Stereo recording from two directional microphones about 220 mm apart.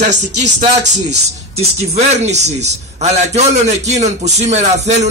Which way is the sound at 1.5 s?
30° right (ahead or behind).